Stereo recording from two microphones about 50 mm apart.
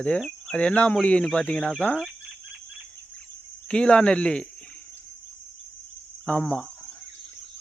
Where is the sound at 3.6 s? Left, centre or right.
Left.